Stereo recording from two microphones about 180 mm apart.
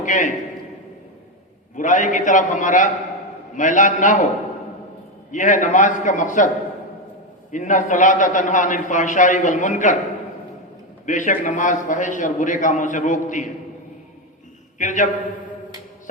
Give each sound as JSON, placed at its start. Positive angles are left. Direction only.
{"t": 0.0, "sound": "a man's voice", "side_deg": 45}
{"t": 1.7, "sound": "a man's voice", "side_deg": 45}
{"t": 5.3, "sound": "a man's voice", "side_deg": 45}
{"t": 7.5, "sound": "a man's voice", "side_deg": 45}
{"t": 11.0, "sound": "a man's voice", "side_deg": 45}
{"t": 14.8, "sound": "a man's voice", "side_deg": 45}